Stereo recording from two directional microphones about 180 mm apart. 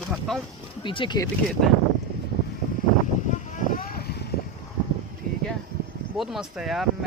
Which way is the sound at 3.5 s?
50° left (ahead or behind).